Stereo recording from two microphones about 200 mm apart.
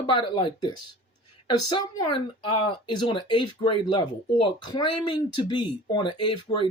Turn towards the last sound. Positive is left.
turn(degrees=25)  # may be behind; listen again after turning